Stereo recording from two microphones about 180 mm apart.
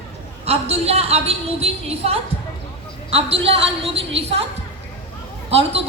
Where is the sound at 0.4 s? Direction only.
35° right (ahead or behind).